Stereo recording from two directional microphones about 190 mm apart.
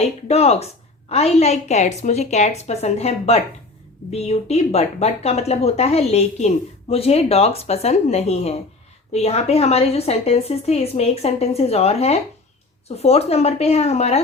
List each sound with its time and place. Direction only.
0.3 s speech: 35° left (ahead or behind)